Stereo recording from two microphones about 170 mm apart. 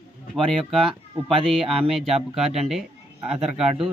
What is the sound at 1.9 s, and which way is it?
Speech, centre (ahead or behind).